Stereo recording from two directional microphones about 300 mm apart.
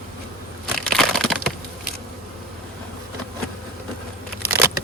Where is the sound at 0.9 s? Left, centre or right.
Centre.